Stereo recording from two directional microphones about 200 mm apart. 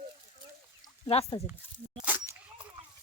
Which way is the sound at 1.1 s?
30° left (ahead or behind).